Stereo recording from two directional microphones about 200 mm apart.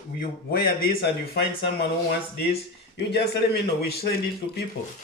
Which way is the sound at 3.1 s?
55° left (ahead or behind).